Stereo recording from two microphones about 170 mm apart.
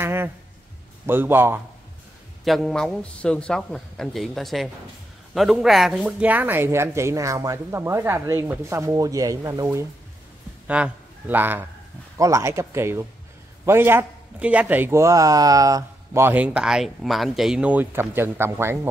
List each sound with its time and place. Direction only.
0.0 s speech: 15° right (ahead or behind)
2.4 s a man's voice: centre (ahead or behind)